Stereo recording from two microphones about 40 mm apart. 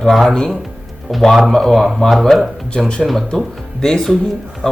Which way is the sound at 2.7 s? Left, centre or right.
Centre.